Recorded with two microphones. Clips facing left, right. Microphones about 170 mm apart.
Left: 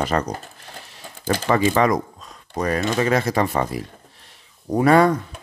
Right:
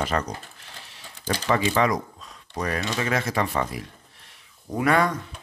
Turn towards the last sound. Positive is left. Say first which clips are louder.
# left 7 dB
turn(degrees=35)  # may be behind; listen again after turning